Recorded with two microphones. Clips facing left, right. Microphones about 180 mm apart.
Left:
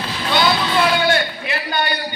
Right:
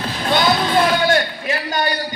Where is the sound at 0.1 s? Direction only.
45° right (ahead or behind).